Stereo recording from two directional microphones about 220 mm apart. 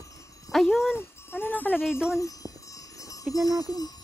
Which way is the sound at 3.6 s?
15° left (ahead or behind).